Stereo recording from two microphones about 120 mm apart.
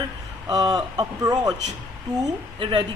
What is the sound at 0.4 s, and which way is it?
Speech, 30° right (ahead or behind).